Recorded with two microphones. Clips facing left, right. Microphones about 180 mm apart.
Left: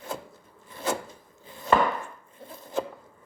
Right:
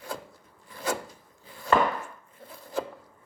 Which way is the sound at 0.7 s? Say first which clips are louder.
Left 1 dB; 25° left (ahead or behind).